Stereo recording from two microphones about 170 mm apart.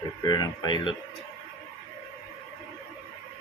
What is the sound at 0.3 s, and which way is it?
Speech, 25° left (ahead or behind).